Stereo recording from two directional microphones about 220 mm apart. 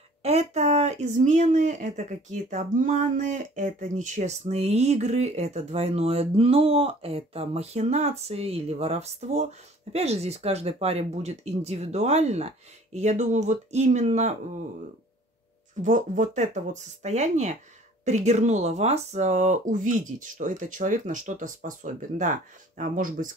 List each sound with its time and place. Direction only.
0.2 s speech: 30° right (ahead or behind)
15.8 s speech: 35° right (ahead or behind)